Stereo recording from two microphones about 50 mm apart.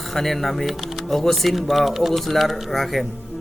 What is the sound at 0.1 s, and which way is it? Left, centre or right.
A man's voice, centre.